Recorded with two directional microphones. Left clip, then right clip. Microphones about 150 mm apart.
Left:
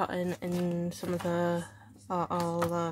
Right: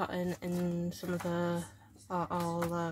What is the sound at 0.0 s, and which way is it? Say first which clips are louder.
Speech: left 4 dB; 35° left (ahead or behind).